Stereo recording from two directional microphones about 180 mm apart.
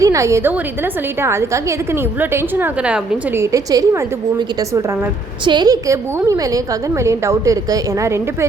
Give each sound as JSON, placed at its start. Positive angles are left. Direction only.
{"t": 0.0, "sound": "a woman's voice", "side_deg": -15}
{"t": 3.4, "sound": "a woman's voice", "side_deg": -20}